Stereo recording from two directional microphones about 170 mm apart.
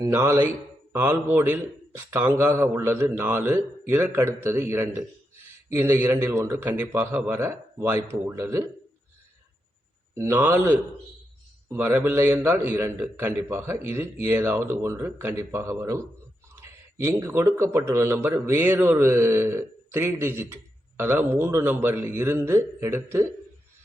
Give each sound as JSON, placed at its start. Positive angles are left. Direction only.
{"t": 0.0, "sound": "a man's voice", "side_deg": -15}
{"t": 10.2, "sound": "a man's voice", "side_deg": -15}